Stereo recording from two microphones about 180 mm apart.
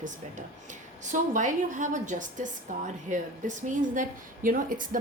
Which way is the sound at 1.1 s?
45° right (ahead or behind).